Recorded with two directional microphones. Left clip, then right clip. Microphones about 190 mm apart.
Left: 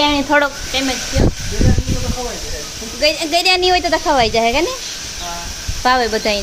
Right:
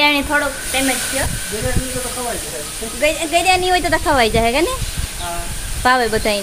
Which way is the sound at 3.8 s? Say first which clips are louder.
Left 1 dB; 5° left (ahead or behind).